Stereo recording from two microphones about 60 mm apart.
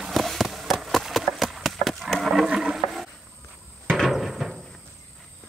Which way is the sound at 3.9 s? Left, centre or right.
Centre.